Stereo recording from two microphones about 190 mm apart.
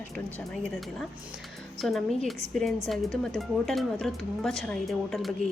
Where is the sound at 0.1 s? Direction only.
5° left (ahead or behind).